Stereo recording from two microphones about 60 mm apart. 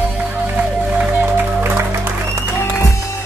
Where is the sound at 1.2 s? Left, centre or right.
Right.